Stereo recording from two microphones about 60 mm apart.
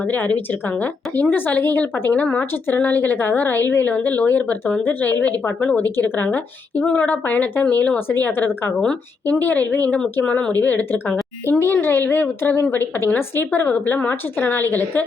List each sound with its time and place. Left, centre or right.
0.0 s a woman's voice: left
12.4 s speech: left
13.5 s a woman's voice: left